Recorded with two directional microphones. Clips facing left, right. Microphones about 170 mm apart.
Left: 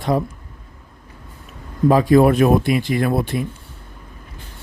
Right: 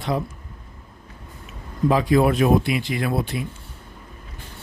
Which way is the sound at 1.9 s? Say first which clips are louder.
Left 5 dB; 45° left (ahead or behind).